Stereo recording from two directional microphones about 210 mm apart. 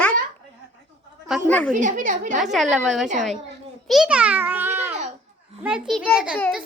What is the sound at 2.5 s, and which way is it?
A child's voice, centre (ahead or behind).